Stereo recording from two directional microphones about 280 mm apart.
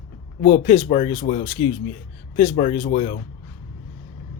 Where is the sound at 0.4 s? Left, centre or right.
Left.